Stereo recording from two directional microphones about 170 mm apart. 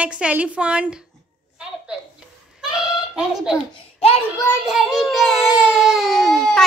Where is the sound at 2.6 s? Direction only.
5° right (ahead or behind).